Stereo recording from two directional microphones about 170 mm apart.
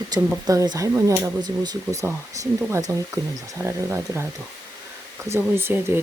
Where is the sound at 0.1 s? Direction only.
25° right (ahead or behind).